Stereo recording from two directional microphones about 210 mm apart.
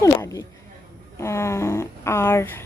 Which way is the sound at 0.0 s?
15° left (ahead or behind).